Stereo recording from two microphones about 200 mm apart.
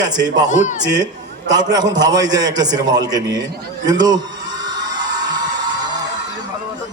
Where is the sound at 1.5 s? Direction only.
20° right (ahead or behind).